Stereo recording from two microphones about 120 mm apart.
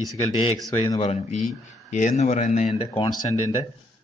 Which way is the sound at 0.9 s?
65° left (ahead or behind).